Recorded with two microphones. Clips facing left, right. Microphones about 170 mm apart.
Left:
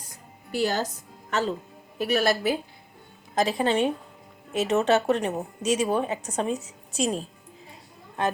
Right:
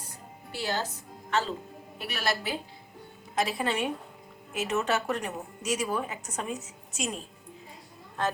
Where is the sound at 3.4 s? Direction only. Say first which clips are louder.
Left 6 dB; 30° left (ahead or behind).